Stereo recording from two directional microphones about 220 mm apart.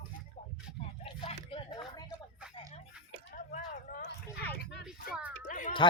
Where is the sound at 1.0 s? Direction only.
25° left (ahead or behind).